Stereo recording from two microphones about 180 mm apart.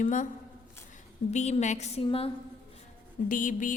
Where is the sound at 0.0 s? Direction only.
45° left (ahead or behind).